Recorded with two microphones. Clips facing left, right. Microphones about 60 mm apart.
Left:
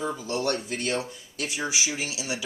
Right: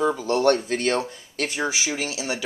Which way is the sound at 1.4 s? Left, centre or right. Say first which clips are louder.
Right 4 dB; right.